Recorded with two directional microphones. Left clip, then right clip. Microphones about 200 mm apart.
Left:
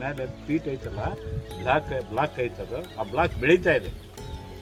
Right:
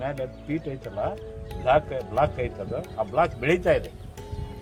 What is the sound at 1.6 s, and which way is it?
Speech, 20° right (ahead or behind).